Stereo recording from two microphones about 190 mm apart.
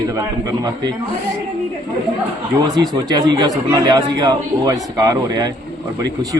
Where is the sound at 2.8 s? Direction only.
20° right (ahead or behind).